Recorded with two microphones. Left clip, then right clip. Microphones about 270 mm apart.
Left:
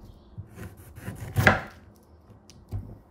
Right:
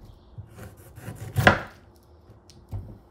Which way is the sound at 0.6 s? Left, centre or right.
Centre.